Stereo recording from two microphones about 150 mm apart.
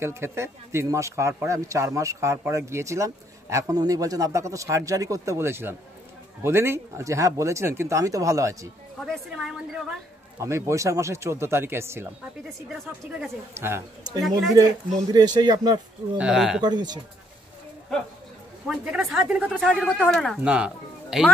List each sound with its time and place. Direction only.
0.0 s speech: 15° right (ahead or behind)
9.0 s a woman's voice: centre (ahead or behind)
10.4 s speech: 20° right (ahead or behind)
12.4 s a woman's voice: centre (ahead or behind)
13.6 s speech: 15° right (ahead or behind)
15.1 s speech: 25° right (ahead or behind)
16.2 s speech: 5° right (ahead or behind)
16.6 s speech: 30° right (ahead or behind)
18.7 s a woman's voice: 5° right (ahead or behind)
20.4 s speech: 5° right (ahead or behind)